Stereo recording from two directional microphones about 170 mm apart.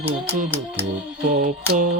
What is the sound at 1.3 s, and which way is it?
Music, 50° right (ahead or behind).